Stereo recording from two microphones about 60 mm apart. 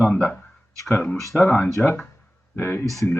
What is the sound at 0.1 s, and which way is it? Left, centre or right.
Speech, centre.